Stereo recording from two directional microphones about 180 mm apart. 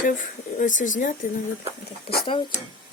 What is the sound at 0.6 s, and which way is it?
Speech, 45° left (ahead or behind).